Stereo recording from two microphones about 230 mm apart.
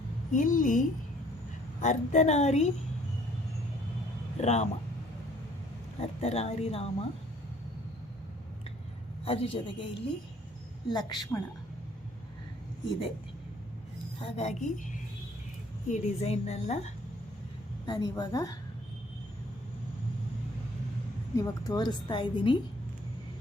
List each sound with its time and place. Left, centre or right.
0.3 s a woman's voice: left
4.4 s a woman's voice: left
6.0 s a woman's voice: left
9.2 s a woman's voice: left
10.8 s a woman's voice: centre
14.2 s a woman's voice: left
15.9 s a woman's voice: left
17.8 s a woman's voice: centre
21.3 s a woman's voice: centre